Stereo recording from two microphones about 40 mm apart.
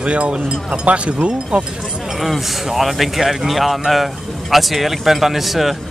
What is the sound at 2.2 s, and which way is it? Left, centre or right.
Speech, centre.